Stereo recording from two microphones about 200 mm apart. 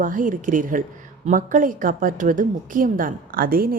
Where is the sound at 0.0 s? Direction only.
40° right (ahead or behind).